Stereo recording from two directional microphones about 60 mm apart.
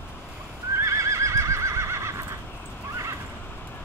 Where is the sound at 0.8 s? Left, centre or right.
Right.